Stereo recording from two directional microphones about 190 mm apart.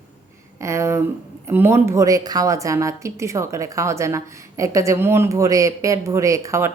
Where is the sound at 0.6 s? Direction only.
15° right (ahead or behind).